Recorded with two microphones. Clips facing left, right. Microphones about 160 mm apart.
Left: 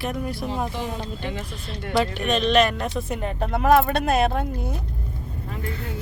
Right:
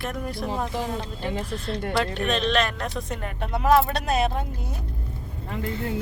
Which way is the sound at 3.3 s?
50° left (ahead or behind).